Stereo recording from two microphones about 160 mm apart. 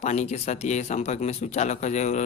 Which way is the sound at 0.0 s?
45° left (ahead or behind).